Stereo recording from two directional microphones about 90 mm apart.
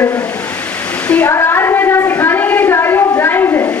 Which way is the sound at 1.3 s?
30° left (ahead or behind).